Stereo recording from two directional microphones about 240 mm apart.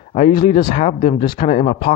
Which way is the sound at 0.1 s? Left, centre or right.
Left.